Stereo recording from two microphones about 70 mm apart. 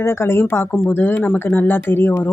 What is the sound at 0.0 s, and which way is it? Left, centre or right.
Speech, left.